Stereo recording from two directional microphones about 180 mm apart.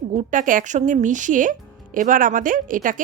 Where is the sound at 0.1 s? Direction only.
40° right (ahead or behind).